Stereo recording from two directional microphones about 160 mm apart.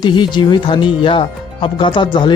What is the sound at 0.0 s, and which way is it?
Speech, 30° left (ahead or behind).